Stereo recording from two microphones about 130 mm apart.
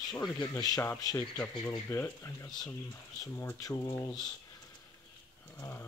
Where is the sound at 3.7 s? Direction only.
20° left (ahead or behind).